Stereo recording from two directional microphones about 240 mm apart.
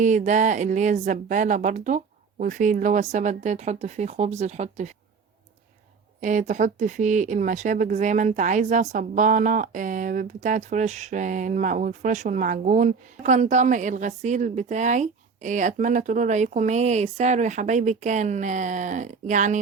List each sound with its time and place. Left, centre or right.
0.0 s speech: right
6.1 s speech: right